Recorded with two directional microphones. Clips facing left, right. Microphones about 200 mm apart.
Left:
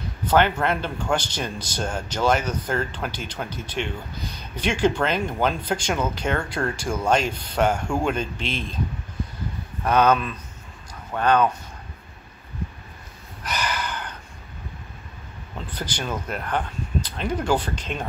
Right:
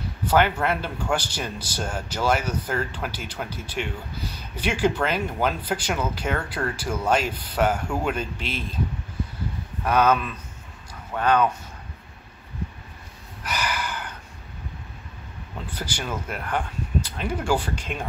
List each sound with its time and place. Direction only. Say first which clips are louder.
0.2 s speech: left 1 dB; 5° right (ahead or behind)
9.8 s speech: left 1 dB; 5° right (ahead or behind)
13.4 s snort: left 1 dB; 10° right (ahead or behind)
15.7 s speech: left 2 dB; 10° right (ahead or behind)